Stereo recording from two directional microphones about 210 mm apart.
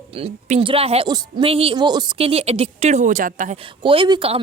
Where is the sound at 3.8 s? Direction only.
25° right (ahead or behind).